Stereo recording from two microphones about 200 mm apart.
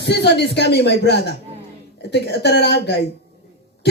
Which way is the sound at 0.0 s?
55° left (ahead or behind).